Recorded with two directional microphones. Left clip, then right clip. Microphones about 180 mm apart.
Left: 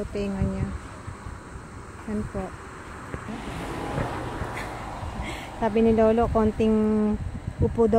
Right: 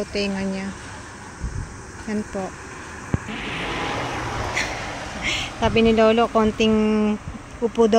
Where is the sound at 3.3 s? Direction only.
35° left (ahead or behind).